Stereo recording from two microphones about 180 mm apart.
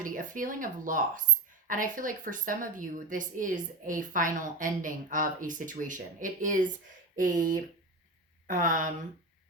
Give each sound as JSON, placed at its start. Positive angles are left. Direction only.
{"t": 0.0, "sound": "a woman's voice", "side_deg": -50}